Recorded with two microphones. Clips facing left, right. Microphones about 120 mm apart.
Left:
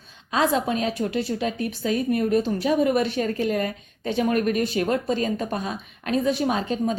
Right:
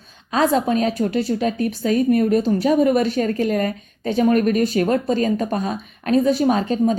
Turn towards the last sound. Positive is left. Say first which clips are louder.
# right 6 dB
turn(degrees=-40)  # may be behind; listen again after turning